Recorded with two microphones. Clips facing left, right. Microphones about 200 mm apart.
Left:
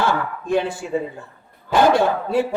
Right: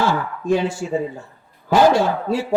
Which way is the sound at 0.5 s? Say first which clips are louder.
Right 1 dB; 60° left (ahead or behind).